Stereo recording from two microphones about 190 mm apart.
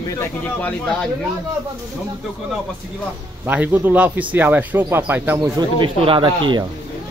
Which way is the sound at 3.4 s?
10° right (ahead or behind).